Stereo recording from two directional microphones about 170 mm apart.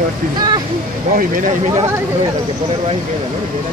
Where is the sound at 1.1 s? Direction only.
50° right (ahead or behind).